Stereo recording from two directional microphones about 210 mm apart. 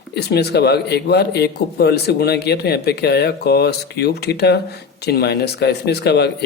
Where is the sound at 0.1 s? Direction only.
50° left (ahead or behind).